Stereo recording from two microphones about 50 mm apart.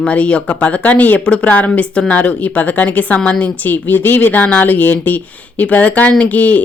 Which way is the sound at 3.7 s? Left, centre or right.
Left.